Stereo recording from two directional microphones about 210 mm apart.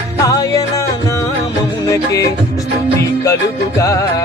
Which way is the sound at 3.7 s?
15° left (ahead or behind).